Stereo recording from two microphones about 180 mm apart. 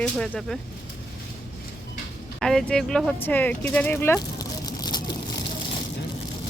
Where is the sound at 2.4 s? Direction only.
5° left (ahead or behind).